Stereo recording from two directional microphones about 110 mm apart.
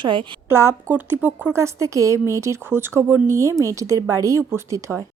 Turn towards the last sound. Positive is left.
turn(degrees=-25)  # may be behind; listen again after turning